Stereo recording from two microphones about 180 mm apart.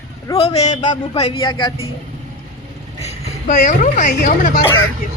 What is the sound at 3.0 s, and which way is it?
Speech, 40° left (ahead or behind).